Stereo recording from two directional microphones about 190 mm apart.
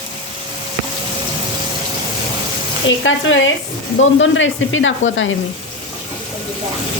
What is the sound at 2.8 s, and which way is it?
Sizzle, 90° left.